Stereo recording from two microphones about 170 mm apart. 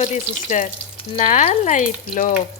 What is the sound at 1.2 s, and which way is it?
Speech, 45° left (ahead or behind).